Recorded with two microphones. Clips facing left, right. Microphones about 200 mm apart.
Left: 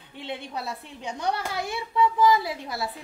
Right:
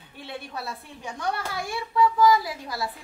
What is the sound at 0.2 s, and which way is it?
A woman's voice, 20° left (ahead or behind).